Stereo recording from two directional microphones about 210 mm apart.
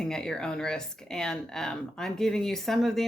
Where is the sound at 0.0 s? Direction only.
5° left (ahead or behind).